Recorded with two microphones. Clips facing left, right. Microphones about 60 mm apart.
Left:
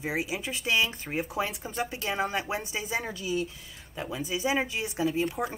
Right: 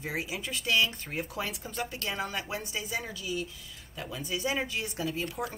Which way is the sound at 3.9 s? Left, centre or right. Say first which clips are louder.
Left 4 dB; left.